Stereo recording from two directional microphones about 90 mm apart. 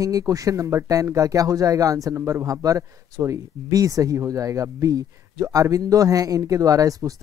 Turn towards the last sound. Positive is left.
turn(degrees=-40)  # may be behind; listen again after turning